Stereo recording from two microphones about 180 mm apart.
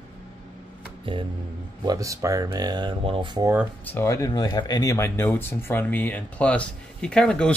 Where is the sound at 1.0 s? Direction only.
25° right (ahead or behind).